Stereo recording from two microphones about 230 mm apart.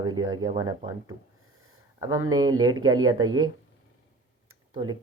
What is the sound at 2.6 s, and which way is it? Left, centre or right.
Speech, centre.